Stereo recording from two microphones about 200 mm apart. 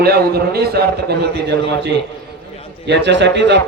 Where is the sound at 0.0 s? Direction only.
50° right (ahead or behind).